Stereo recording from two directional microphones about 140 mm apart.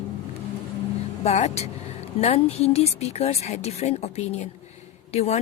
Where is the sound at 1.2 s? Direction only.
50° left (ahead or behind).